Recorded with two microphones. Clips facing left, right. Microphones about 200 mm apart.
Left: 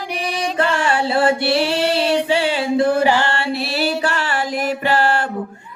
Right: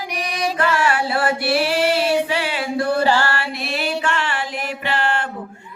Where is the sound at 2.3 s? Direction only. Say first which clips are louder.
Left 5 dB; 30° left (ahead or behind).